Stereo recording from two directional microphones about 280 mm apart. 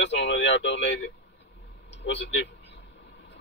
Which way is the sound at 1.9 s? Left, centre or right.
Left.